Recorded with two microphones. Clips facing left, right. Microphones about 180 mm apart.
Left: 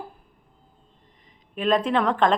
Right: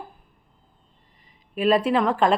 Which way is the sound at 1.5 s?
5° right (ahead or behind).